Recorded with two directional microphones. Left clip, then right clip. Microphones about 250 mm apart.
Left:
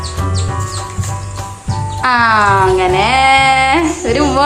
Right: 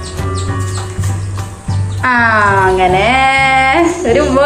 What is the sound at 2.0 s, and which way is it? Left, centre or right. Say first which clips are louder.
Speech: even; left.